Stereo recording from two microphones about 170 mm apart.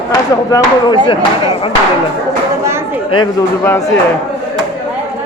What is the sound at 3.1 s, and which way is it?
Speech, 30° left (ahead or behind).